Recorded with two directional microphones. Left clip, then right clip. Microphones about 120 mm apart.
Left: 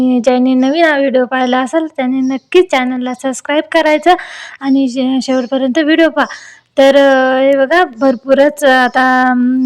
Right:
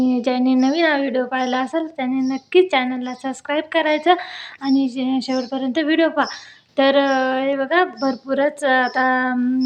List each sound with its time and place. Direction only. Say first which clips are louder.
0.0 s speech: left 8 dB; 70° left (ahead or behind)